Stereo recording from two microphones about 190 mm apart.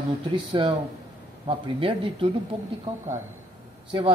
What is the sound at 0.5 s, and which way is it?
Speech, 25° right (ahead or behind).